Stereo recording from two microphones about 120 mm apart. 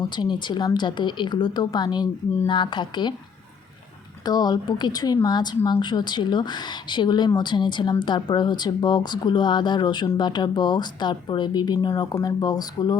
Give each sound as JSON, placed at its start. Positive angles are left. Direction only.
{"t": 0.2, "sound": "a woman's voice", "side_deg": 40}
{"t": 4.3, "sound": "a woman's voice", "side_deg": 35}